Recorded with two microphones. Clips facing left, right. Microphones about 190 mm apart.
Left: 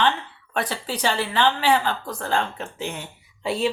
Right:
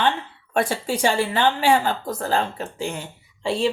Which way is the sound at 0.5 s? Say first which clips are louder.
Right 5 dB; 45° right (ahead or behind).